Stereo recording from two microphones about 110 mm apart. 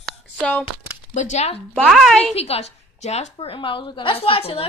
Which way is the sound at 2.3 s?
70° left (ahead or behind).